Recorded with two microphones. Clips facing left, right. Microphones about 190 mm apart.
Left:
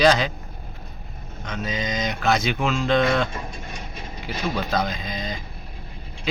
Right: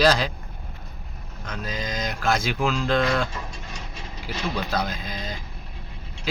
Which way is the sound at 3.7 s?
55° left (ahead or behind).